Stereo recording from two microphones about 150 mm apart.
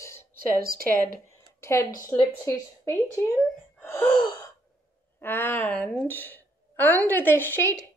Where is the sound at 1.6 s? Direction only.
20° left (ahead or behind).